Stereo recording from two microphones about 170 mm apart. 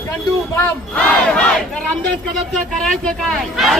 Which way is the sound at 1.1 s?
5° left (ahead or behind).